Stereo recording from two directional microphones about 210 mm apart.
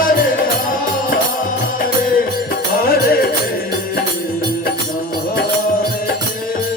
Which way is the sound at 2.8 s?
45° left (ahead or behind).